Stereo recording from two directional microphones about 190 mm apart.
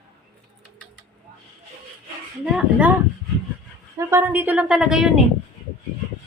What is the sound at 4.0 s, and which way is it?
Speech, 10° right (ahead or behind).